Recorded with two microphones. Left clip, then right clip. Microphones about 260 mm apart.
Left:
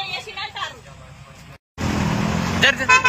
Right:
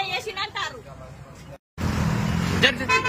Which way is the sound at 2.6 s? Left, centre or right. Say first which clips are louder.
Left 4 dB; centre.